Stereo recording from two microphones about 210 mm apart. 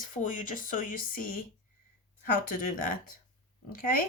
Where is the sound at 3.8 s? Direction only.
40° left (ahead or behind).